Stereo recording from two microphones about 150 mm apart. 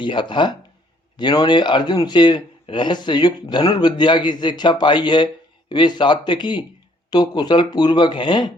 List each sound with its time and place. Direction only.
0.0 s speech: 30° left (ahead or behind)